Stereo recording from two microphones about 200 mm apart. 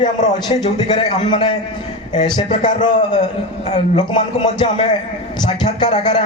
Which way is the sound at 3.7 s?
25° left (ahead or behind).